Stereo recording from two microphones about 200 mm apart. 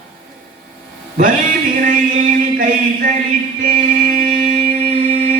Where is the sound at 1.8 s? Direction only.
40° right (ahead or behind).